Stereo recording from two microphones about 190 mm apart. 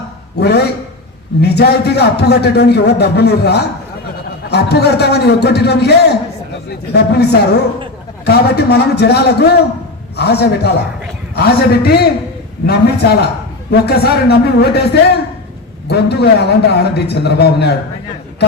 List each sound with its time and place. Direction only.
0.3 s a man's voice: 60° left (ahead or behind)
15.9 s a man's voice: 60° left (ahead or behind)